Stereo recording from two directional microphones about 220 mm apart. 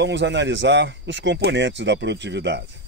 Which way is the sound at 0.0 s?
55° right (ahead or behind).